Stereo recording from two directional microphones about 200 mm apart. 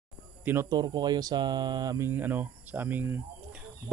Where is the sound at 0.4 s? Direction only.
10° right (ahead or behind).